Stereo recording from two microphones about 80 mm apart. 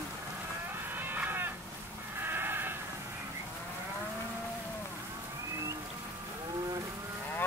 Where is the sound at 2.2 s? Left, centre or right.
Right.